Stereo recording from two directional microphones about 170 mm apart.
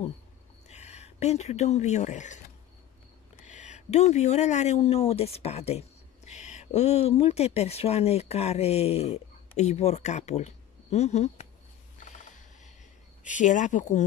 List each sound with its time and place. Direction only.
0.7 s speech: 40° left (ahead or behind)
12.0 s a sound: 45° left (ahead or behind)
13.3 s speech: 45° left (ahead or behind)